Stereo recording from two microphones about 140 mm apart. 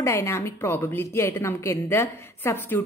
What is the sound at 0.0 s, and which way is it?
A woman's voice, 20° left (ahead or behind).